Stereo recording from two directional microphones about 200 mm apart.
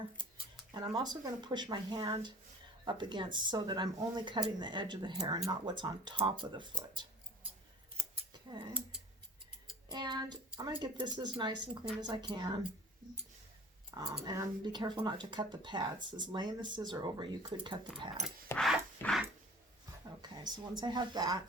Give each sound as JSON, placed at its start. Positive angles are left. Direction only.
{"t": 0.7, "sound": "speech", "side_deg": -20}
{"t": 9.9, "sound": "speech", "side_deg": -20}
{"t": 13.9, "sound": "speech", "side_deg": -20}
{"t": 18.4, "sound": "music", "side_deg": 5}
{"t": 20.2, "sound": "speech", "side_deg": -20}